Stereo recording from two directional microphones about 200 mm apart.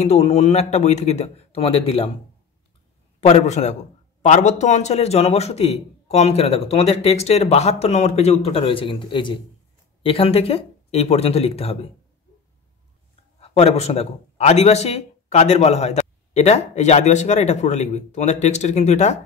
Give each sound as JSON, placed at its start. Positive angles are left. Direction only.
{"t": 0.0, "sound": "a man's voice", "side_deg": 30}
{"t": 3.2, "sound": "a man's voice", "side_deg": 35}
{"t": 13.4, "sound": "a man's voice", "side_deg": 30}